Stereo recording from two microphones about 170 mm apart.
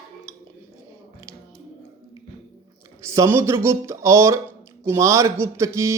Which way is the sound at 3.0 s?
15° right (ahead or behind).